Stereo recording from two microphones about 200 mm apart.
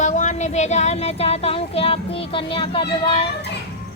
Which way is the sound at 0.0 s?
35° left (ahead or behind).